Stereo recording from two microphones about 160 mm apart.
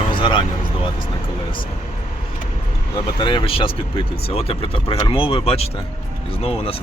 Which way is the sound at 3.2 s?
30° left (ahead or behind).